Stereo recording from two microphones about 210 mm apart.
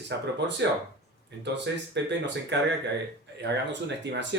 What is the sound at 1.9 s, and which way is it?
Speech, 55° right (ahead or behind).